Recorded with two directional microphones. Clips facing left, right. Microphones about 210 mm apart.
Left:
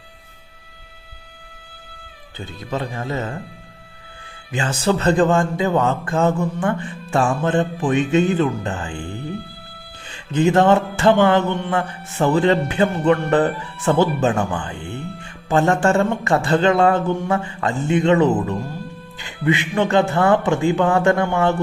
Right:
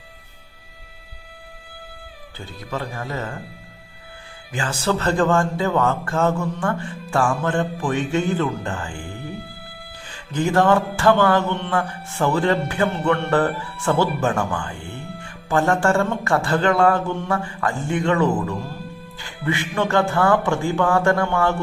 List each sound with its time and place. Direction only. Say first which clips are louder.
2.4 s speech: left 3 dB; 20° left (ahead or behind)
4.5 s speech: left 3 dB; 20° left (ahead or behind)
10.1 s speech: left 5 dB; 20° left (ahead or behind)